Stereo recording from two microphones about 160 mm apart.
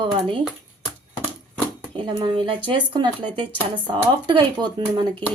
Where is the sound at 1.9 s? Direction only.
30° right (ahead or behind).